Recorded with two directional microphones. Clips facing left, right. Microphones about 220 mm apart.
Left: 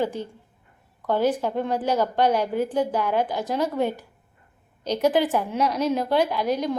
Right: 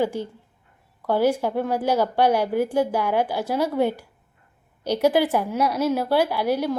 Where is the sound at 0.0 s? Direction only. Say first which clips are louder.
Right 2 dB; 10° right (ahead or behind).